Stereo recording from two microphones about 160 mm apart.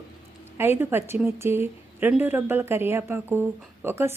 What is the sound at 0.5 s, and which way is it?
A woman's voice, 15° right (ahead or behind).